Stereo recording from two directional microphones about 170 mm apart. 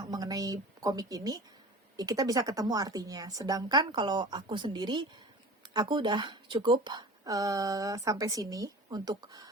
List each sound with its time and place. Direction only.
0.0 s speech: 25° right (ahead or behind)